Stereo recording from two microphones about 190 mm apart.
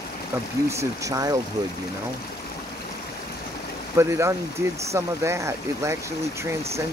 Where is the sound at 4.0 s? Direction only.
15° right (ahead or behind).